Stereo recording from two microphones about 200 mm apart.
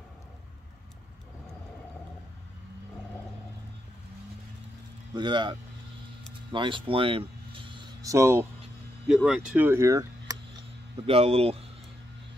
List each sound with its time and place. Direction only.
5.1 s speech: 20° right (ahead or behind)
11.1 s speech: 30° right (ahead or behind)